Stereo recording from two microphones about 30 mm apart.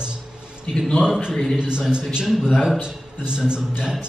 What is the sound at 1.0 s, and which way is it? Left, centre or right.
Speech, right.